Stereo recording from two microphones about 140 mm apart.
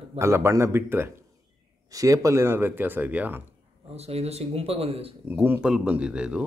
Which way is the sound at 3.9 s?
45° right (ahead or behind).